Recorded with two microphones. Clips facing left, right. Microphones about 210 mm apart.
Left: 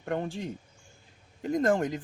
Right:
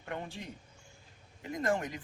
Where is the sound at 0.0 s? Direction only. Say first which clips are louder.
Left 9 dB; 40° left (ahead or behind).